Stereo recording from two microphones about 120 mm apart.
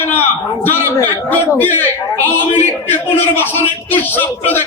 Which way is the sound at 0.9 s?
15° left (ahead or behind).